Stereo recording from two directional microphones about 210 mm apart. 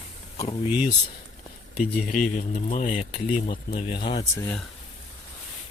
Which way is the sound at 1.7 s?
40° left (ahead or behind).